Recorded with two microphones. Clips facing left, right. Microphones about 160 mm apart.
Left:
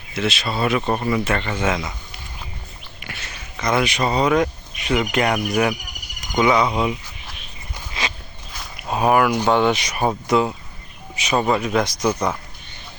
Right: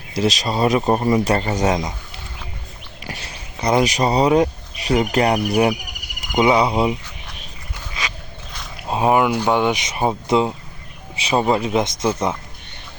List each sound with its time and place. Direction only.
0.1 s speech: 35° right (ahead or behind)
3.0 s speech: 35° right (ahead or behind)
8.0 s walk: 30° left (ahead or behind)
8.9 s a sound: 25° right (ahead or behind)
9.4 s speech: 15° right (ahead or behind)